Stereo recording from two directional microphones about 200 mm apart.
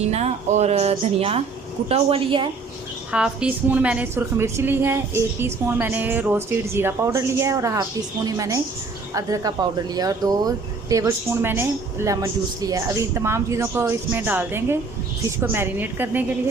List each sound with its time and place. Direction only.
0.0 s a woman's voice: 35° right (ahead or behind)
3.1 s speech: 5° right (ahead or behind)